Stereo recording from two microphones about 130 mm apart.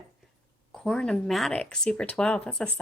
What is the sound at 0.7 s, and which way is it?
A woman's voice, 5° left (ahead or behind).